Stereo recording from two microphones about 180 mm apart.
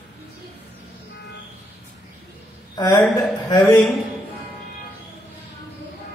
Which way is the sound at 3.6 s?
10° left (ahead or behind).